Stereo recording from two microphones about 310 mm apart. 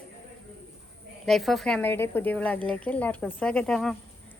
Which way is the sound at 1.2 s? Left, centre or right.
Centre.